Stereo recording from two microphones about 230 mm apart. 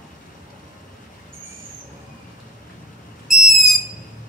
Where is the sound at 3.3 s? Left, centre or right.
Centre.